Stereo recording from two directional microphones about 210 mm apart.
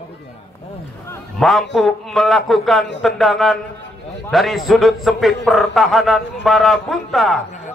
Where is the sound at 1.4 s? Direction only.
Centre (ahead or behind).